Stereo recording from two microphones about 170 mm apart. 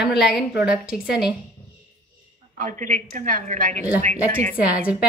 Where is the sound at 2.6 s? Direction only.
50° right (ahead or behind).